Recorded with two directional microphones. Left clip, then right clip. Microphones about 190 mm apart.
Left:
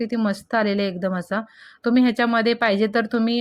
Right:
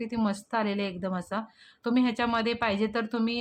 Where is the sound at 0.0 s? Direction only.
20° left (ahead or behind).